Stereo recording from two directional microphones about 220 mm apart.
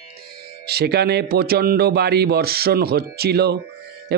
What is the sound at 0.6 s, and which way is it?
A man's voice, 45° right (ahead or behind).